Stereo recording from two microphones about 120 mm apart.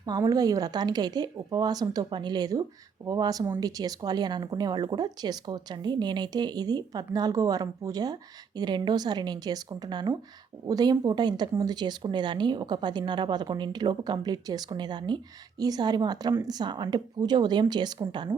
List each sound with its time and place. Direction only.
0.0 s speech: 30° right (ahead or behind)